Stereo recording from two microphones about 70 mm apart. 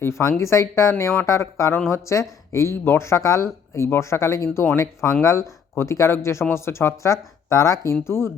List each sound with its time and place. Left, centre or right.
0.0 s speech: left
8.0 s speech: left